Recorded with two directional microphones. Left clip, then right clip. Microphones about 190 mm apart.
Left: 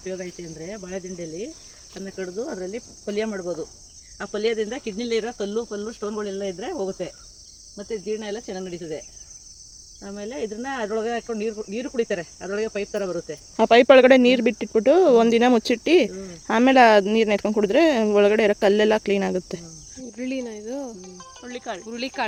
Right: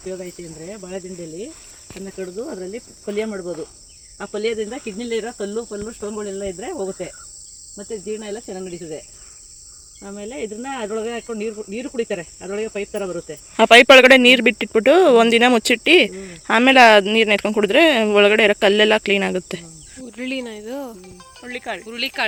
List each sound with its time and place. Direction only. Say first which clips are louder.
0.1 s cricket: right 2 dB; 5° right (ahead or behind)
2.1 s cricket: right 1 dB; 30° right (ahead or behind)
4.3 s cricket: right 1 dB; 15° right (ahead or behind)
5.0 s cricket: even; 30° right (ahead or behind)
8.3 s cricket: right 1 dB; 10° right (ahead or behind)
10.0 s cricket: right 1 dB; 20° right (ahead or behind)
10.8 s cricket: even; 30° right (ahead or behind)
13.0 s cricket: right 1 dB; 15° right (ahead or behind)
13.6 s speech: right 5 dB; centre (ahead or behind)
21.4 s speech: right 4 dB; 35° right (ahead or behind)
21.8 s speech: right 6 dB; 40° left (ahead or behind)